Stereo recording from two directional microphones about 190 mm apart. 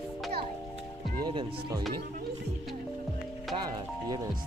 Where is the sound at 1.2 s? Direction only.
25° right (ahead or behind).